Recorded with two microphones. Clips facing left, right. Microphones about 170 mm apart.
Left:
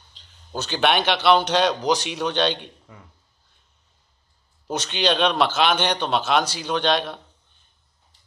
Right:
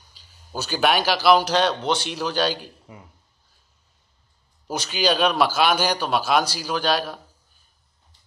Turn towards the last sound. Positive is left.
turn(degrees=-5)  # may be behind; listen again after turning